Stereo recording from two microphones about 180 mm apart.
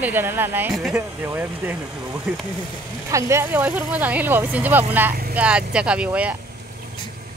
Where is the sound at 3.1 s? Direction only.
15° right (ahead or behind).